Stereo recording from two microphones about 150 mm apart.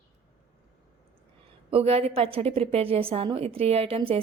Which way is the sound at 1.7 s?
40° right (ahead or behind).